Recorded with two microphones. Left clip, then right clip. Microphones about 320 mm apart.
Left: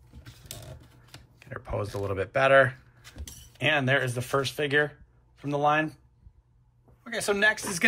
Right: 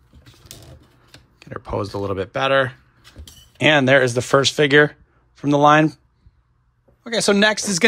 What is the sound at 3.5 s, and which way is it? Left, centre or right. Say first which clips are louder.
Speech: right 11 dB; centre.